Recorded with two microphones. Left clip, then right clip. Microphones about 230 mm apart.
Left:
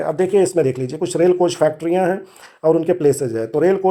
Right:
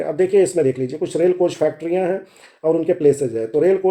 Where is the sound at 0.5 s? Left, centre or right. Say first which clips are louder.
Even; left.